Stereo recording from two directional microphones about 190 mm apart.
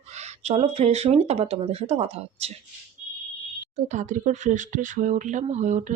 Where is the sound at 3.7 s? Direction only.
40° right (ahead or behind).